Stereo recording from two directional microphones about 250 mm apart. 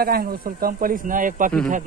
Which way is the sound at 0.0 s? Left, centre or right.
Right.